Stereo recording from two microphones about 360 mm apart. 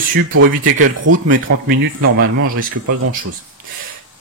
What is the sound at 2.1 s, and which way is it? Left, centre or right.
Speech, right.